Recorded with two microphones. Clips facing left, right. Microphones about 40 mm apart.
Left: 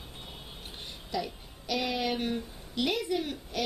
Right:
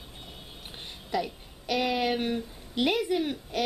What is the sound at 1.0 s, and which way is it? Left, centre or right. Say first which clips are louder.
A woman's voice: right 4 dB; centre.